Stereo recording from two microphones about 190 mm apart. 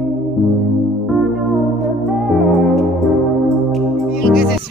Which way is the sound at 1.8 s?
Centre (ahead or behind).